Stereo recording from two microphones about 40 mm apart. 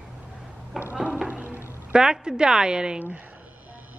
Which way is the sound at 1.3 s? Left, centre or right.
Right.